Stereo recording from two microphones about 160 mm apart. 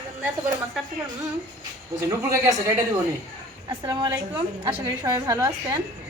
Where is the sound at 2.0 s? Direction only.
20° right (ahead or behind).